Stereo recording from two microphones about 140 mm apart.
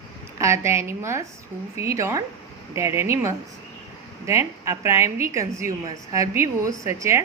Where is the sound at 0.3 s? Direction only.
20° right (ahead or behind).